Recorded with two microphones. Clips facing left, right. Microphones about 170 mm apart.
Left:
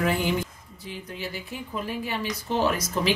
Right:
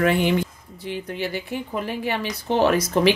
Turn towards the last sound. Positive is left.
turn(degrees=-65)  # may be behind; listen again after turning